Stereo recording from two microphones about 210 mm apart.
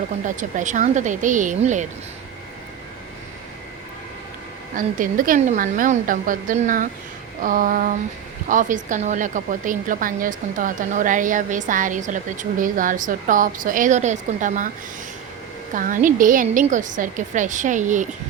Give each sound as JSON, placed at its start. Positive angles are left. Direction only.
{"t": 0.3, "sound": "a woman's voice", "side_deg": -35}
{"t": 4.7, "sound": "a woman's voice", "side_deg": -40}
{"t": 15.7, "sound": "a woman's voice", "side_deg": -40}